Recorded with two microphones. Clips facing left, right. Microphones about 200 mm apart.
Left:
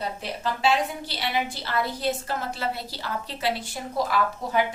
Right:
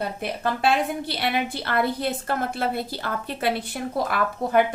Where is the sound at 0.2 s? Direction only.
55° right (ahead or behind).